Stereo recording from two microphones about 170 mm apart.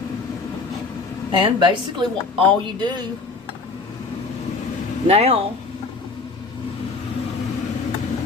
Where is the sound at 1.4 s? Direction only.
25° right (ahead or behind).